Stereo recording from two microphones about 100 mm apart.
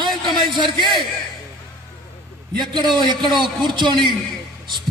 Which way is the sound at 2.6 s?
45° right (ahead or behind).